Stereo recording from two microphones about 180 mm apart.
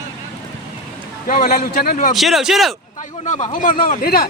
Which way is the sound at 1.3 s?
55° left (ahead or behind).